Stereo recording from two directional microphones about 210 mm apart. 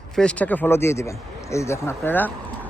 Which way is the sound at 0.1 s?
5° left (ahead or behind).